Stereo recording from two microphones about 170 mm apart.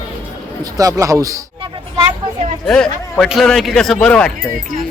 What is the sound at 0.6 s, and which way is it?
Speech, 20° right (ahead or behind).